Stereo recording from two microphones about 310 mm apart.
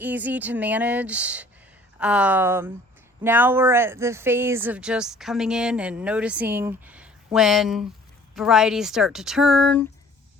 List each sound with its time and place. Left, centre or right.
0.0 s speech: centre